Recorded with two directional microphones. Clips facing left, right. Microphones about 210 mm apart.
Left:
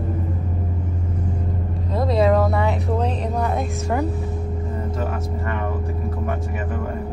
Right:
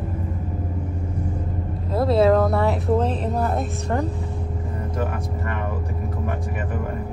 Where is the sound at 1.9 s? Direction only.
5° right (ahead or behind).